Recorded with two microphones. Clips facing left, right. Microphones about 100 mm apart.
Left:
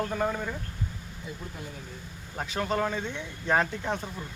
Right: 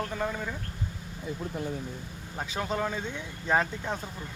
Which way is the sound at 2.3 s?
Centre (ahead or behind).